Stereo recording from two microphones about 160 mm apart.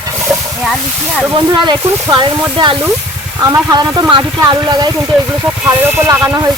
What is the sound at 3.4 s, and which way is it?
Speech, 20° right (ahead or behind).